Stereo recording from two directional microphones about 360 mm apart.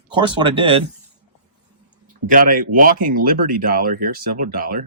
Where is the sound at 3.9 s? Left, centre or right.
Right.